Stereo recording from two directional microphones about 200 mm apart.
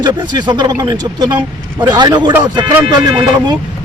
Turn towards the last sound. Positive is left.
turn(degrees=-20)  # may be behind; listen again after turning